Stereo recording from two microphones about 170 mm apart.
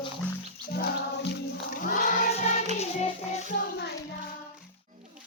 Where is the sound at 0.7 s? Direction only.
70° left (ahead or behind).